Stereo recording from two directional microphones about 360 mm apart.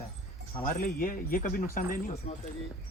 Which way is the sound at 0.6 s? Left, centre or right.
Left.